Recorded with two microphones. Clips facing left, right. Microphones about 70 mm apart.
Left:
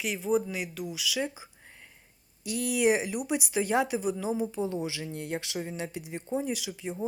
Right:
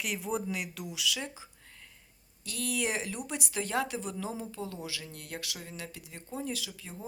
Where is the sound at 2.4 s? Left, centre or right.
Centre.